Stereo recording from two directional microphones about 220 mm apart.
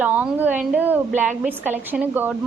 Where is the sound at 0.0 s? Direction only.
5° right (ahead or behind).